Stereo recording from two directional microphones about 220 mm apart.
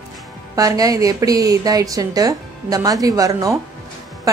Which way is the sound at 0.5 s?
15° right (ahead or behind).